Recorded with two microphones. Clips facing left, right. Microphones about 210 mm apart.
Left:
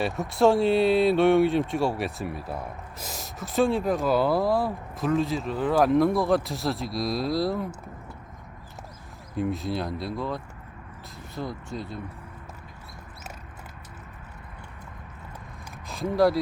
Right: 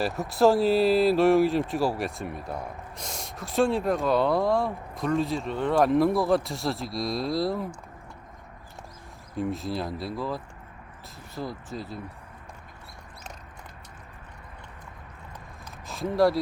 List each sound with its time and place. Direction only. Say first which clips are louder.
0.0 s speech: even; centre (ahead or behind)
9.3 s speech: left 1 dB; centre (ahead or behind)
15.9 s speech: left 1 dB; centre (ahead or behind)